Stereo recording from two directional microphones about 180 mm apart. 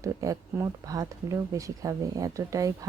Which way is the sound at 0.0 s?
20° right (ahead or behind).